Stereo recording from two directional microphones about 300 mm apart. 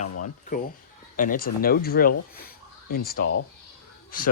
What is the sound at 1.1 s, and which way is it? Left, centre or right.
Speech, left.